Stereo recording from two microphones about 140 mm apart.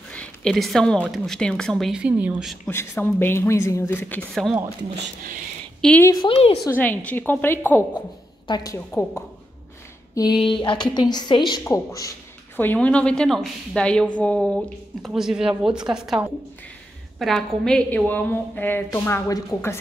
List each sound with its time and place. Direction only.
0.1 s a sound: 5° left (ahead or behind)
1.0 s speech: centre (ahead or behind)
2.7 s a woman's voice: 15° left (ahead or behind)
5.8 s a woman's voice: 5° left (ahead or behind)
6.2 s a woman's voice: 45° left (ahead or behind)
6.6 s a woman's voice: 15° left (ahead or behind)
8.5 s speech: 30° left (ahead or behind)
8.7 s a woman's voice: 15° left (ahead or behind)
10.1 s a woman's voice: 30° left (ahead or behind)
12.5 s a woman's voice: 10° left (ahead or behind)